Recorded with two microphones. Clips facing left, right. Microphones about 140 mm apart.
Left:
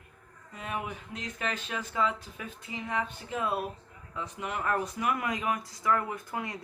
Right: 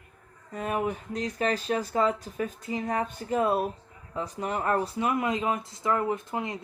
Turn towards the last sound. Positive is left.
turn(degrees=-25)  # may be behind; listen again after turning